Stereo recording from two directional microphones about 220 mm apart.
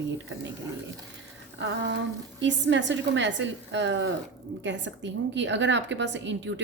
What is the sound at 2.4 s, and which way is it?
A woman's voice, 55° right (ahead or behind).